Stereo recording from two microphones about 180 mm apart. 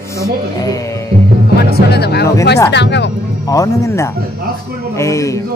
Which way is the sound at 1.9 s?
65° left (ahead or behind).